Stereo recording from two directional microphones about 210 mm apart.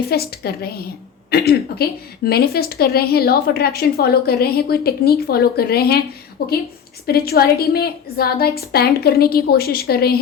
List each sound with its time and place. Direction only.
0.0 s a woman's voice: 50° left (ahead or behind)